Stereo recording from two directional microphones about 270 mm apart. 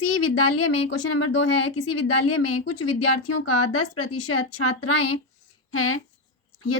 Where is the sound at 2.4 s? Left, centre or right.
Left.